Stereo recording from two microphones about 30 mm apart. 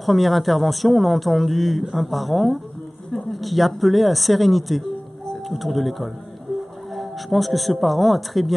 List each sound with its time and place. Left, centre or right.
0.0 s speech: centre